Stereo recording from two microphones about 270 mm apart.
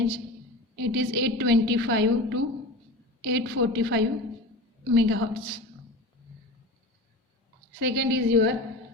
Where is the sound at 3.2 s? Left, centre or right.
Right.